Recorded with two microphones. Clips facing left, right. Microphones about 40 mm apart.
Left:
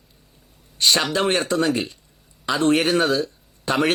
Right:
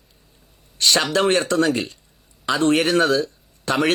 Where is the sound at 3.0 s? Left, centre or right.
Centre.